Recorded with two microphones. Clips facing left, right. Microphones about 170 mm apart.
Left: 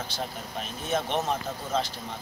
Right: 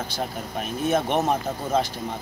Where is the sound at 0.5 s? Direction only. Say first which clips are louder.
Right 7 dB; 55° right (ahead or behind).